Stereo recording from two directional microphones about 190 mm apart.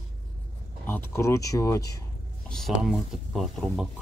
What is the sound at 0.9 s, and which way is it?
Speech, 15° left (ahead or behind).